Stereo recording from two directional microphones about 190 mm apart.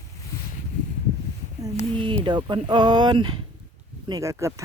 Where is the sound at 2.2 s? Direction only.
25° right (ahead or behind).